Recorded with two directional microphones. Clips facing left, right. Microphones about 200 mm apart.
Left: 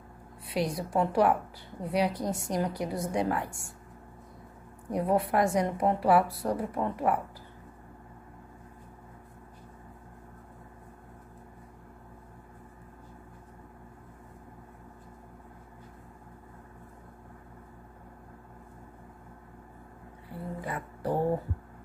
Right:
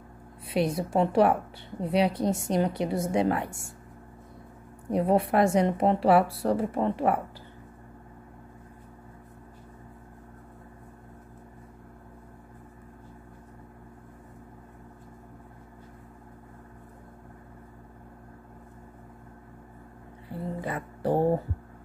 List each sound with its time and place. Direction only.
0.5 s speech: 25° right (ahead or behind)
4.9 s speech: 25° right (ahead or behind)
20.6 s a sound: 25° right (ahead or behind)